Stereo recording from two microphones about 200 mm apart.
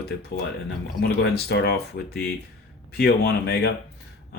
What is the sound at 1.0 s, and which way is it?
Speech, 55° left (ahead or behind).